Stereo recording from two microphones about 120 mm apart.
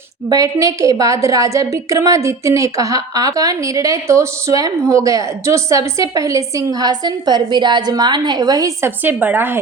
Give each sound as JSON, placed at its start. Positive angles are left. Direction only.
{"t": 0.3, "sound": "a woman's voice", "side_deg": -30}
{"t": 9.0, "sound": "speech", "side_deg": -15}